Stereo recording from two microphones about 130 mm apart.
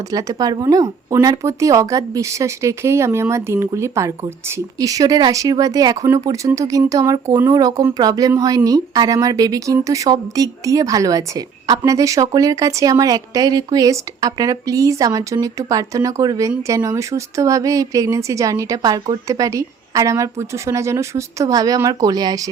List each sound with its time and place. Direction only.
0.1 s speech: 30° right (ahead or behind)